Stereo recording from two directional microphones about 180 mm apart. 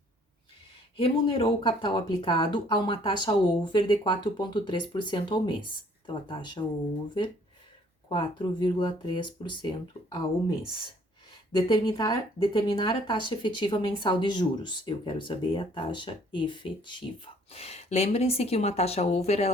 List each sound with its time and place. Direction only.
0.9 s speech: 30° left (ahead or behind)
8.1 s speech: 25° left (ahead or behind)
11.5 s speech: 25° left (ahead or behind)
17.5 s speech: 35° left (ahead or behind)